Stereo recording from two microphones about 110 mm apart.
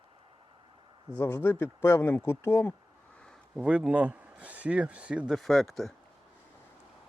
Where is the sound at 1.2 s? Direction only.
20° left (ahead or behind).